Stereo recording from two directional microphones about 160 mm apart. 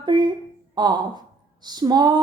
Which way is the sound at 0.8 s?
25° right (ahead or behind).